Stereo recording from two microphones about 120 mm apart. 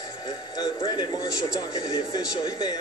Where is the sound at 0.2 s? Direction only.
35° left (ahead or behind).